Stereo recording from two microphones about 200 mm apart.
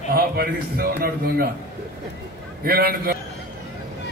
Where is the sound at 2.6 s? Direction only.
50° right (ahead or behind).